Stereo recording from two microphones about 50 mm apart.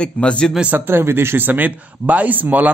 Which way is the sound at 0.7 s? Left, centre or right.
Right.